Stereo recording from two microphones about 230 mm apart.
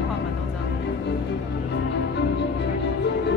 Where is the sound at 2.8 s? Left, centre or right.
Left.